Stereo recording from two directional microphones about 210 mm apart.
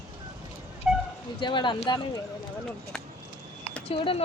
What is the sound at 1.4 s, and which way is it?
Speech, 20° left (ahead or behind).